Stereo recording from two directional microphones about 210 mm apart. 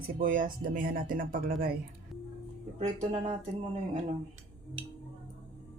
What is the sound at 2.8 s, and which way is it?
Speech, 30° right (ahead or behind).